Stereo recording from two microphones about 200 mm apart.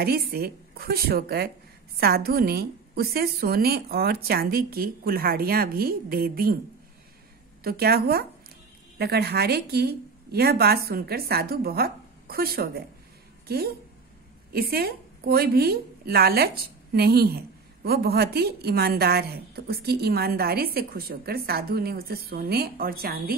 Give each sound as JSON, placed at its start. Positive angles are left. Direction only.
{"t": 0.0, "sound": "a woman's voice", "side_deg": -50}
{"t": 7.6, "sound": "a woman's voice", "side_deg": -50}